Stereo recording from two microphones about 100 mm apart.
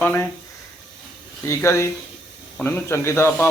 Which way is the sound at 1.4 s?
25° left (ahead or behind).